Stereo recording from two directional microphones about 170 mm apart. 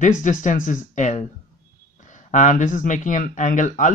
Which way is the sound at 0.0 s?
50° left (ahead or behind).